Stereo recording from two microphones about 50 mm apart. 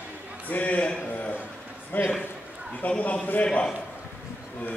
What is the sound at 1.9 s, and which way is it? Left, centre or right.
A man's voice, left.